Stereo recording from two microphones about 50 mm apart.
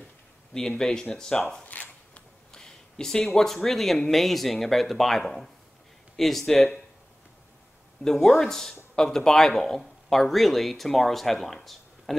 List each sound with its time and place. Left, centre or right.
0.6 s speech: centre
1.6 s zipper: left
2.5 s a sound: centre
3.3 s speech: centre
6.5 s speech: centre
8.0 s a man's voice: centre